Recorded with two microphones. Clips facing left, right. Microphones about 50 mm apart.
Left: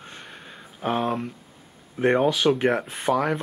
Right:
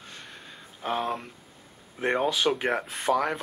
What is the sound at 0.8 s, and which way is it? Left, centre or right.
Speech, centre.